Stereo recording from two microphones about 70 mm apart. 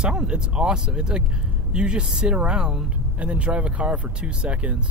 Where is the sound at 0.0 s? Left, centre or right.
Centre.